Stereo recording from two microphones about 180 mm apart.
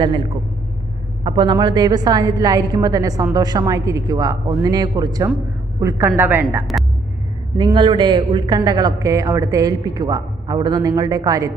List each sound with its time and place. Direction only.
0.0 s a man's voice: 25° right (ahead or behind)
7.5 s a man's voice: 25° right (ahead or behind)